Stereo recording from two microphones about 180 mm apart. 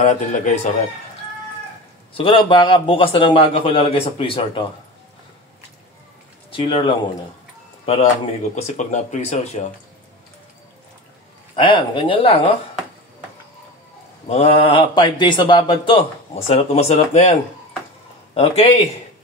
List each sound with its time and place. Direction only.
0.0 s speech: 40° left (ahead or behind)
2.1 s speech: 30° left (ahead or behind)
6.5 s speech: 30° left (ahead or behind)
8.5 s speech: 40° left (ahead or behind)
11.5 s speech: 30° left (ahead or behind)
14.3 s speech: 30° left (ahead or behind)